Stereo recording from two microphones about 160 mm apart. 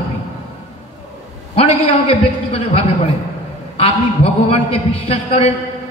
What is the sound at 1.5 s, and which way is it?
A man's voice, 40° left (ahead or behind).